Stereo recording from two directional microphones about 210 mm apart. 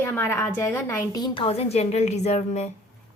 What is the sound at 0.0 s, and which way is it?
A woman's voice, 10° left (ahead or behind).